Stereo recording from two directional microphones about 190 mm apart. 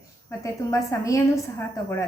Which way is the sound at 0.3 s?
15° left (ahead or behind).